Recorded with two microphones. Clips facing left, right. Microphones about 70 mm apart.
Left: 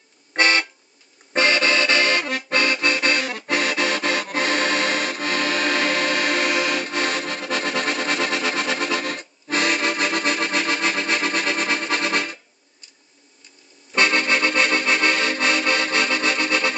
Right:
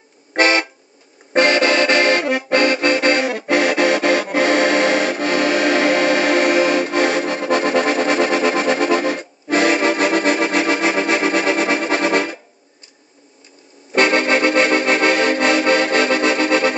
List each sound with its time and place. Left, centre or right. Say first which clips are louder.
0.3 s vehicle horn: right 4 dB; right
1.3 s accordion: right 5 dB; right
4.6 s accordion: right 7 dB; right
5.3 s music: right 6 dB; centre
6.4 s accordion: right 7 dB; right
6.8 s music: right 7 dB; right
11.9 s music: right 6 dB; right
13.9 s music: right 5 dB; right